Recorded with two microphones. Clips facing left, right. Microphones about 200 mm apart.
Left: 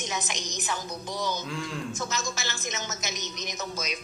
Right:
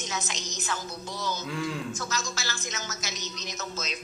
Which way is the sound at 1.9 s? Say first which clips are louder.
Left 1 dB; 20° left (ahead or behind).